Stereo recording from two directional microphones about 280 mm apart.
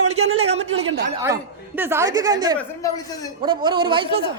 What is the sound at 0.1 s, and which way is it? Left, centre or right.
Speech, right.